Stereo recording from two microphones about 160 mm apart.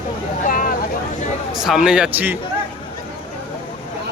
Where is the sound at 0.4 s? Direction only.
55° left (ahead or behind).